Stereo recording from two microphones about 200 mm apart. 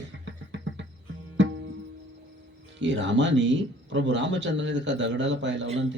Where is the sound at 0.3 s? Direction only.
65° right (ahead or behind).